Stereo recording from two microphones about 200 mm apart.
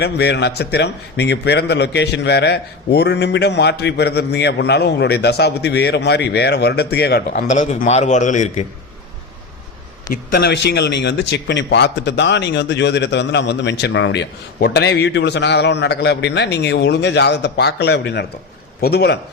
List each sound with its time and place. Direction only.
0.0 s a man's voice: 55° left (ahead or behind)
7.5 s a man's voice: 40° left (ahead or behind)
10.1 s a man's voice: 50° left (ahead or behind)